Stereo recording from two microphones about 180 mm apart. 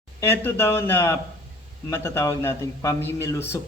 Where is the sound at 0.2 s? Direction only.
15° left (ahead or behind).